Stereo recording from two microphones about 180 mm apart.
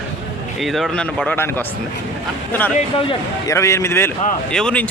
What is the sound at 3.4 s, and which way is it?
A man's voice, 15° left (ahead or behind).